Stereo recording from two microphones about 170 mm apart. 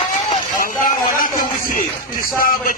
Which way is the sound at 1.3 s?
55° left (ahead or behind).